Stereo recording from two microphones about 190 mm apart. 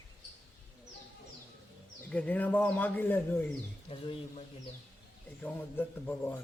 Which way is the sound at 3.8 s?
30° left (ahead or behind).